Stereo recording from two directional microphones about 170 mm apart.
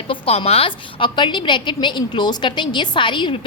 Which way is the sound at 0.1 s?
35° left (ahead or behind).